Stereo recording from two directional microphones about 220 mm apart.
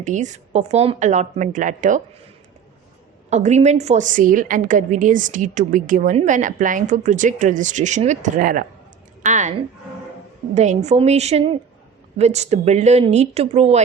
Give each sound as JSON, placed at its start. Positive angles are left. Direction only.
{"t": 0.0, "sound": "a woman's voice", "side_deg": -35}
{"t": 3.2, "sound": "a woman's voice", "side_deg": -30}